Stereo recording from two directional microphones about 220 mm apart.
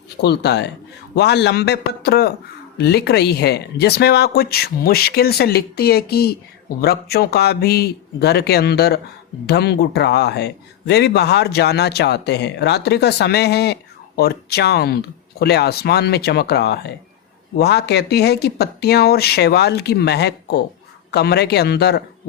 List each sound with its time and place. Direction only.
0.2 s a man's voice: 50° left (ahead or behind)